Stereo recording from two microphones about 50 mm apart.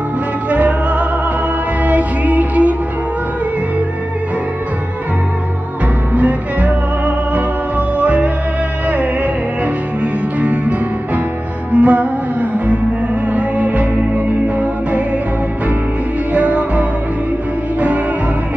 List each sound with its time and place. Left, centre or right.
0.5 s music: right
6.1 s music: right
10.4 s music: right
16.3 s music: right